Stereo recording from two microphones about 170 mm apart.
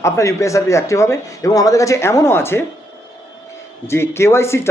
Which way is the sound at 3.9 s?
15° left (ahead or behind).